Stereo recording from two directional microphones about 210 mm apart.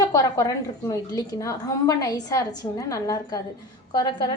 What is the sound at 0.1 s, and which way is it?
A woman's voice, 15° left (ahead or behind).